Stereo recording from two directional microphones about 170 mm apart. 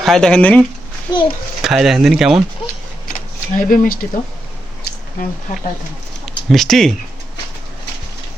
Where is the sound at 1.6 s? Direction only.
Centre (ahead or behind).